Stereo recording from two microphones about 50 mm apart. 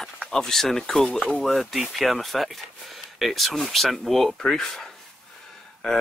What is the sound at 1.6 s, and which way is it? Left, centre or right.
Speech, centre.